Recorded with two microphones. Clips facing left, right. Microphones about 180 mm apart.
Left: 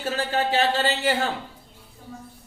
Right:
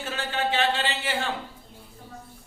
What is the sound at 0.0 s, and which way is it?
Speech, 40° left (ahead or behind).